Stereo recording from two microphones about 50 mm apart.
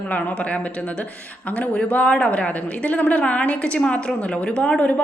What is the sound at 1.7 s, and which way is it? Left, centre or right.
A woman's voice, left.